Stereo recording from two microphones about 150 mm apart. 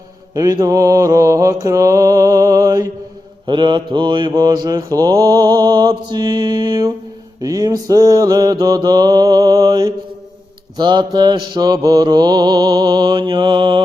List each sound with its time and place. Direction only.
0.3 s mantra: 25° right (ahead or behind)